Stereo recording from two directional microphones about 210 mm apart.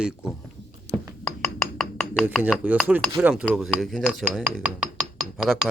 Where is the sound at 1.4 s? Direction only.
10° left (ahead or behind).